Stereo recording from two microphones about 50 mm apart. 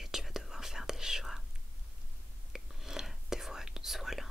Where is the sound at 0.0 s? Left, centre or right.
Centre.